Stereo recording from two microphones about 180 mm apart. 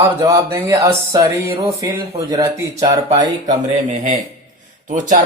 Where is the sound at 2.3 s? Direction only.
20° right (ahead or behind).